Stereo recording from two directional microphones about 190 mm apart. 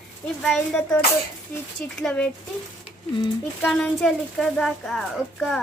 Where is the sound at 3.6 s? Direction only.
Centre (ahead or behind).